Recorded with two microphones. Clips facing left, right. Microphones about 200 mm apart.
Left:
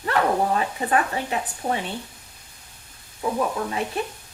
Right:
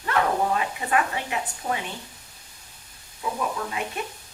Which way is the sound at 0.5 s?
35° left (ahead or behind).